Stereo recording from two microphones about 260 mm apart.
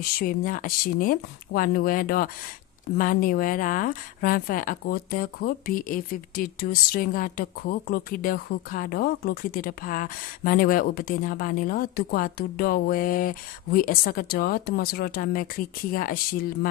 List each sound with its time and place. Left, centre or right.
0.2 s speech: left